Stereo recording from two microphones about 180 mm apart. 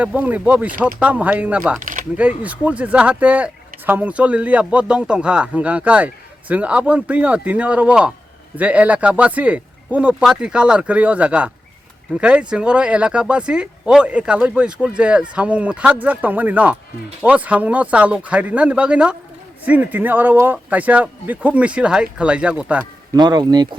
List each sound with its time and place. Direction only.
0.0 s speech: 10° right (ahead or behind)
1.8 s a sound: 45° right (ahead or behind)
2.1 s speech: 10° right (ahead or behind)
23.1 s speech: 25° right (ahead or behind)